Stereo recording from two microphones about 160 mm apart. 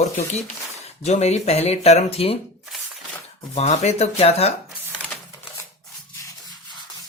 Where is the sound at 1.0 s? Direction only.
45° left (ahead or behind).